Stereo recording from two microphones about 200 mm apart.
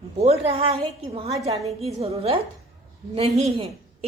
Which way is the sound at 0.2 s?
30° right (ahead or behind).